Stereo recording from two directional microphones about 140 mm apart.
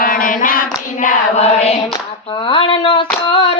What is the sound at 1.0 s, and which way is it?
Chant, 55° left (ahead or behind).